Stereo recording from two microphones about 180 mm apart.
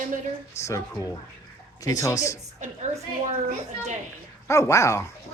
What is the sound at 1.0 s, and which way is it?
Speech, 20° left (ahead or behind).